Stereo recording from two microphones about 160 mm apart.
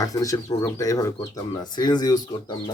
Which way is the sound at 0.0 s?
20° left (ahead or behind).